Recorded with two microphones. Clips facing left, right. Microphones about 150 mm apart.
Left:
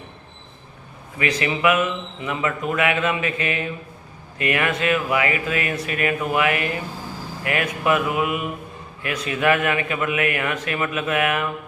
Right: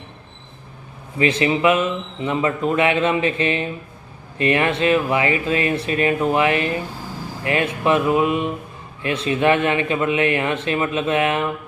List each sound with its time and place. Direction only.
1.2 s speech: 25° right (ahead or behind)